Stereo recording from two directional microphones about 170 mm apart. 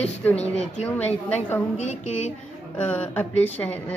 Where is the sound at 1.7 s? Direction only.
45° left (ahead or behind).